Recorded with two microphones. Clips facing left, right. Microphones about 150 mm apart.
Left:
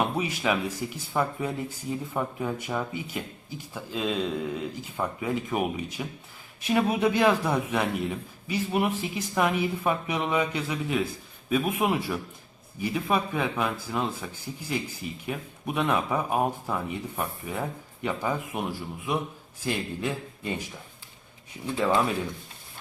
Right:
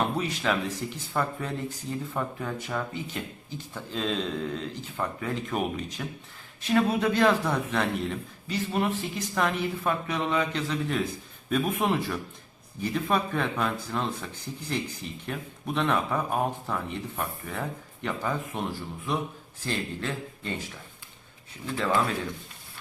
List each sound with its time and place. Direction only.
0.0 s a man's voice: 10° left (ahead or behind)
19.6 s a man's voice: 15° left (ahead or behind)
21.8 s a man's voice: 15° left (ahead or behind)